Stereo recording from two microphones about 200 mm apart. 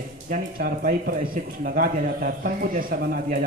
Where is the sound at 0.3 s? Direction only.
45° right (ahead or behind).